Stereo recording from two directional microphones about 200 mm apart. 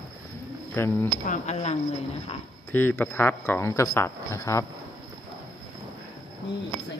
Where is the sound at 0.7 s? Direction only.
10° left (ahead or behind).